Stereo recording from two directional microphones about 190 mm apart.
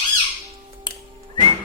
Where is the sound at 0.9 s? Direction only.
25° left (ahead or behind).